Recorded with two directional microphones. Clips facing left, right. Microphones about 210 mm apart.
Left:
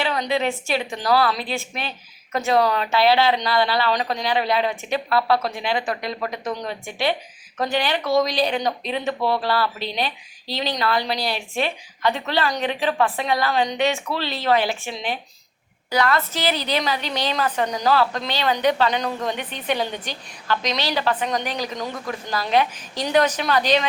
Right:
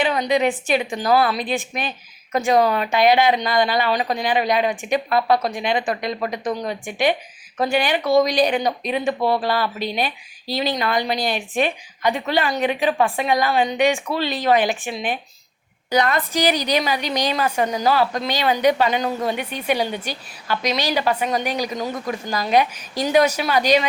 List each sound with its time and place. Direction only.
0.0 s a woman's voice: 15° right (ahead or behind)